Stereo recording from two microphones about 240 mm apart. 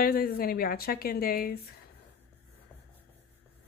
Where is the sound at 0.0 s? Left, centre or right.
Left.